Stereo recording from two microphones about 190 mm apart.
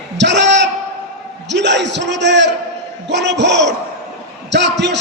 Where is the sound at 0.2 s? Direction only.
65° right (ahead or behind).